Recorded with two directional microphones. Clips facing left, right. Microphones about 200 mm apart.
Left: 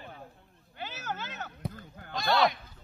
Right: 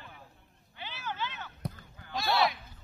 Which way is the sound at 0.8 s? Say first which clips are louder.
Even; 45° left (ahead or behind).